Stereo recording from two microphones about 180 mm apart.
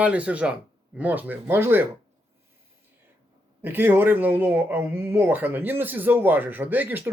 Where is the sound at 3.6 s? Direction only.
10° right (ahead or behind).